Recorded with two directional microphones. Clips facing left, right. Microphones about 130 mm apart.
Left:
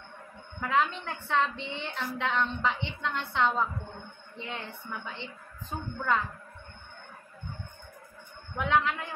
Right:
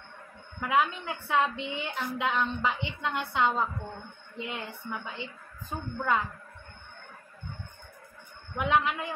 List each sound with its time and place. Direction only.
0.6 s a woman's voice: 10° right (ahead or behind)
8.5 s a woman's voice: 15° right (ahead or behind)